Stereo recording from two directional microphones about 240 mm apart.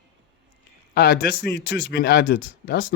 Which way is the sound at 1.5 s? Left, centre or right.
Left.